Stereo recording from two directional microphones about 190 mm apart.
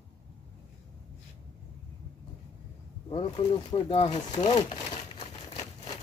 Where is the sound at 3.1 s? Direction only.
25° left (ahead or behind).